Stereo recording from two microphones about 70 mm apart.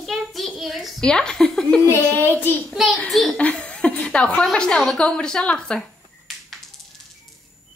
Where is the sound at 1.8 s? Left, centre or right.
Left.